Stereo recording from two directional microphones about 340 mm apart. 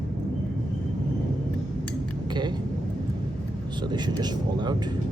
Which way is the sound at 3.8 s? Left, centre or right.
Centre.